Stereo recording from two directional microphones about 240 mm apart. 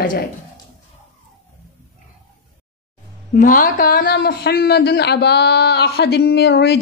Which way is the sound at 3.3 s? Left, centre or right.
Left.